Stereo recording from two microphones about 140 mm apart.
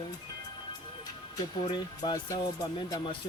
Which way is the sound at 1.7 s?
35° left (ahead or behind).